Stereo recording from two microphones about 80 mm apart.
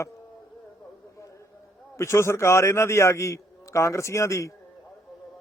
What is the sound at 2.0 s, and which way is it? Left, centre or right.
A man's voice, left.